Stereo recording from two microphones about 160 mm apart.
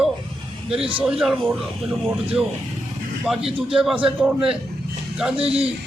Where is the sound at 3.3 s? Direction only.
5° right (ahead or behind).